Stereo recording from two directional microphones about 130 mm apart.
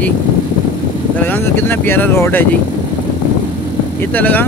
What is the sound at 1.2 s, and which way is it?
Speech, 15° left (ahead or behind).